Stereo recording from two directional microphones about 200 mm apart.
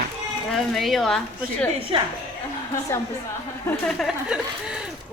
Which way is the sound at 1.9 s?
25° right (ahead or behind).